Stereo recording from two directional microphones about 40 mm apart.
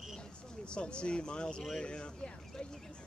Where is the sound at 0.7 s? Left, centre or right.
Left.